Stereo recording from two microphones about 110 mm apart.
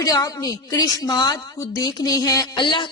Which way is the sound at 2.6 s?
50° left (ahead or behind).